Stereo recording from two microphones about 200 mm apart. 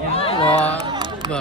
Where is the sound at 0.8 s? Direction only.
20° right (ahead or behind).